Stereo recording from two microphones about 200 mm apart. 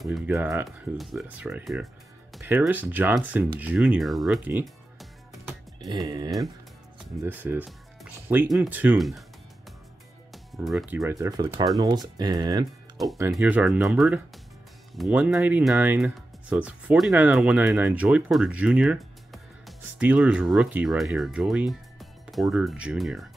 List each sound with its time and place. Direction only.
0.3 s speech: 10° right (ahead or behind)
0.7 s speech: centre (ahead or behind)
5.9 s speech: 20° right (ahead or behind)
7.2 s speech: 10° right (ahead or behind)
10.3 s music: centre (ahead or behind)
11.0 s speech: 15° right (ahead or behind)
12.9 s speech: centre (ahead or behind)